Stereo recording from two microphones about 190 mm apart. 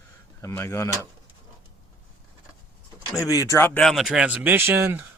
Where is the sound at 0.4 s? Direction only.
15° left (ahead or behind).